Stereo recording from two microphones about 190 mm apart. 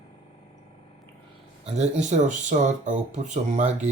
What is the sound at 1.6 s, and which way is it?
Speech, 35° right (ahead or behind).